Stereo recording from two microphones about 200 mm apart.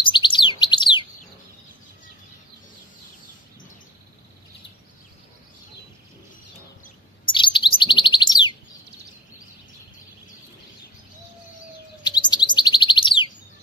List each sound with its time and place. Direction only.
0.1 s chirp: 25° left (ahead or behind)
7.3 s bird: 25° left (ahead or behind)
12.0 s chirp: 20° left (ahead or behind)